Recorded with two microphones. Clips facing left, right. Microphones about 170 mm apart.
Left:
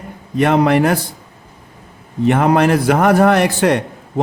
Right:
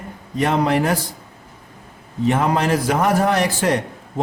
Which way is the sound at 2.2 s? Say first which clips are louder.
Left 5 dB; 65° left (ahead or behind).